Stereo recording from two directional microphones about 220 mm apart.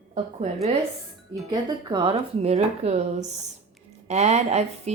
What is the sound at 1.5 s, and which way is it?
Speech, 20° right (ahead or behind).